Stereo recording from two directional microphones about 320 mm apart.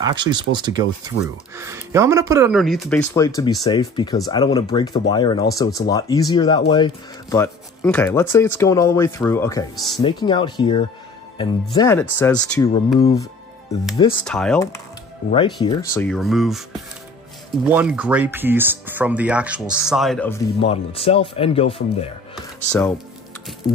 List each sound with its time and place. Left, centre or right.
0.0 s speech: centre
14.2 s speech: centre
15.2 s speech: centre
17.6 s speech: centre
20.6 s speech: centre
22.7 s speech: centre